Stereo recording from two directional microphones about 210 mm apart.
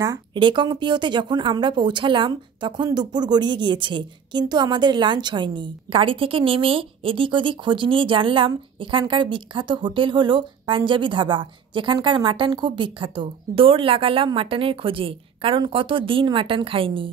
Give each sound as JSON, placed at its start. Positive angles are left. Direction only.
{"t": 0.0, "sound": "speech", "side_deg": -20}